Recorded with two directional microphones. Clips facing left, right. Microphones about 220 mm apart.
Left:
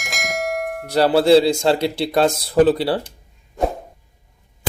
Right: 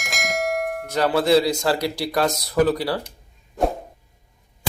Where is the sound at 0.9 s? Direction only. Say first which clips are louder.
Left 5 dB; 35° left (ahead or behind).